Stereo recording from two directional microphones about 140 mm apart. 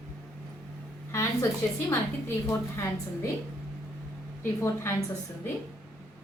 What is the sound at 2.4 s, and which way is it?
Speech, 20° left (ahead or behind).